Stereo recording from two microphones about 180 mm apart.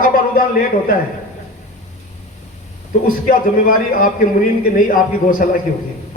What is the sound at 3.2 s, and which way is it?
A man's voice, 50° left (ahead or behind).